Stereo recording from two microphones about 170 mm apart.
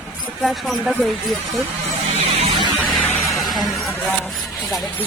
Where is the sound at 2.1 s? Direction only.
35° right (ahead or behind).